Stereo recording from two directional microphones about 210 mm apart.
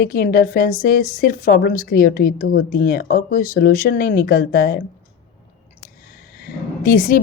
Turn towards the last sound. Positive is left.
turn(degrees=40)  # may be behind; listen again after turning